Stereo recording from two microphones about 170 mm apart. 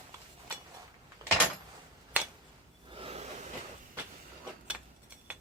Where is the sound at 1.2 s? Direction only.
20° right (ahead or behind).